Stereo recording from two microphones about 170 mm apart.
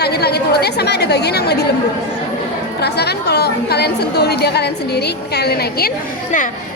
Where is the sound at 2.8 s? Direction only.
75° left (ahead or behind).